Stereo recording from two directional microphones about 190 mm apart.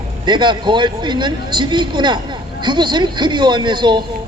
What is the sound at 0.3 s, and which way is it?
Speech, 25° right (ahead or behind).